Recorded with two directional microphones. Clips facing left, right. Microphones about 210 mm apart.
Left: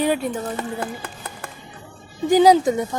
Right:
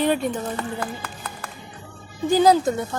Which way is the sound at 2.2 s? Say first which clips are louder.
Left 3 dB; 15° left (ahead or behind).